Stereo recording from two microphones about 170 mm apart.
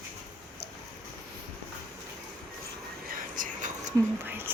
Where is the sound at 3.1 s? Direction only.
50° right (ahead or behind).